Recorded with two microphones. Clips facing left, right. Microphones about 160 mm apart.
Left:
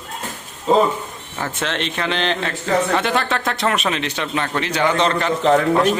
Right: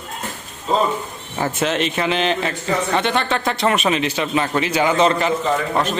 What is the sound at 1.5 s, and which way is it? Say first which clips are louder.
Speech: right 3 dB; 5° right (ahead or behind).